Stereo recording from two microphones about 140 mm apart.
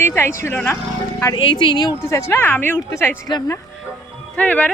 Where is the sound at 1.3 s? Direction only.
30° left (ahead or behind).